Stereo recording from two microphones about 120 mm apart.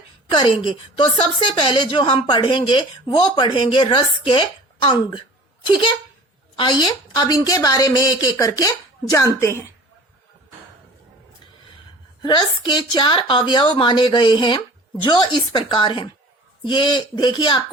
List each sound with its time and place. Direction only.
0.7 s a woman's voice: 45° left (ahead or behind); by 9.7 s 25° left (ahead or behind)
12.2 s a woman's voice: 40° left (ahead or behind)